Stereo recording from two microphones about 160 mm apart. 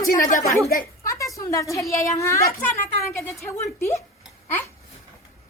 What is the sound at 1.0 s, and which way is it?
A woman's voice, 20° left (ahead or behind).